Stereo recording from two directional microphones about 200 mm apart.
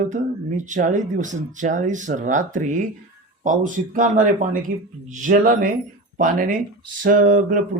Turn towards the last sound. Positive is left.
turn(degrees=-40)  # may be behind; listen again after turning